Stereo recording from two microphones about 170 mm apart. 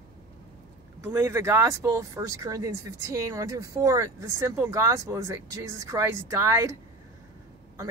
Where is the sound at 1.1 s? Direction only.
15° right (ahead or behind).